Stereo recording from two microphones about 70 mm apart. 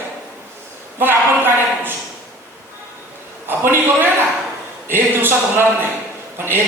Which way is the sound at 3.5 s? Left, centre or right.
Right.